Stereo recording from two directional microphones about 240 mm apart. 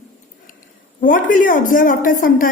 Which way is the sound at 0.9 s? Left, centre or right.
Left.